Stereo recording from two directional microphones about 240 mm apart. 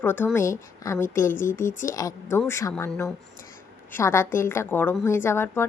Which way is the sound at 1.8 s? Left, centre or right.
Centre.